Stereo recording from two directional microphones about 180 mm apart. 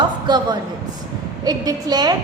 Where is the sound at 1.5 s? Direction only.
20° right (ahead or behind).